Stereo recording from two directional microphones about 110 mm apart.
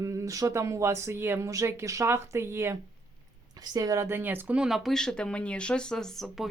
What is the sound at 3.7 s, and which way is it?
Speech, 30° right (ahead or behind).